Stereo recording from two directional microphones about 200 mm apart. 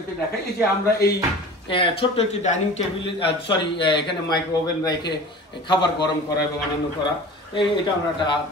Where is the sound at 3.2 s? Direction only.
25° left (ahead or behind).